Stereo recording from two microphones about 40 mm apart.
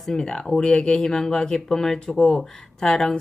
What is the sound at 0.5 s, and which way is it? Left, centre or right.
Speech, left.